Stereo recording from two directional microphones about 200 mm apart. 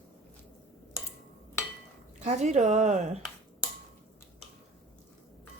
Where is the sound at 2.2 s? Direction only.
35° right (ahead or behind).